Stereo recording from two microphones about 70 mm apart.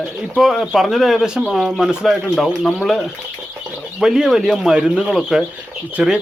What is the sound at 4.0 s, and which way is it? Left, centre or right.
Speech, centre.